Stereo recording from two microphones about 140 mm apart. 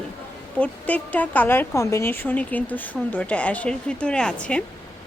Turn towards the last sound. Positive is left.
turn(degrees=5)  # may be behind; listen again after turning